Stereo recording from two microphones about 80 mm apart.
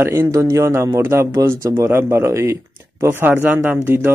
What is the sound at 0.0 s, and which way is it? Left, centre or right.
Speech, right.